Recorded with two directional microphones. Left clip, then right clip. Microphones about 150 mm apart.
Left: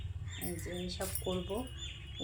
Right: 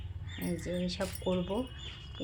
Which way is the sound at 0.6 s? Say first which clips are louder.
Right 5 dB; 65° right (ahead or behind).